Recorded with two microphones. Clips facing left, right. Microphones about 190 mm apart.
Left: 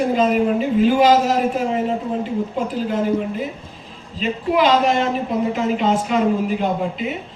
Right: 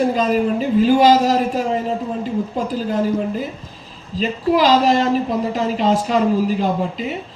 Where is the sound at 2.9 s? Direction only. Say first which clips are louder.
Right 1 dB; 35° right (ahead or behind).